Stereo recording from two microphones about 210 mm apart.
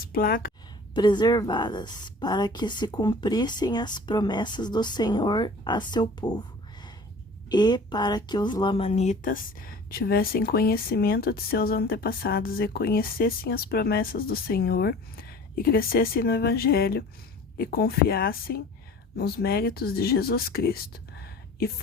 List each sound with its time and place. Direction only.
0.0 s speech: 45° left (ahead or behind)
0.9 s a woman's voice: 20° left (ahead or behind)
7.5 s speech: 20° left (ahead or behind); by 21.7 s 45° left (ahead or behind)